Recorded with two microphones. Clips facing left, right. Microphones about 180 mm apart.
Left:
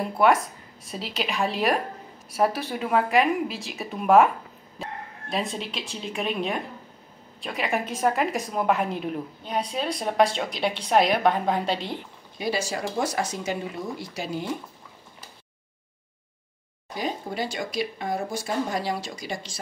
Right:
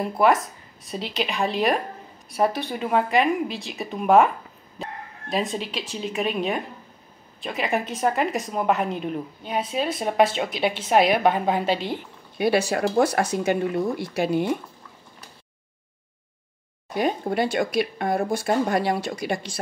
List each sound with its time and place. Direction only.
0.0 s a woman's voice: centre (ahead or behind)
4.8 s bow-wow: centre (ahead or behind)
5.3 s a woman's voice: centre (ahead or behind)
12.4 s speech: 60° right (ahead or behind)
16.9 s speech: 60° right (ahead or behind)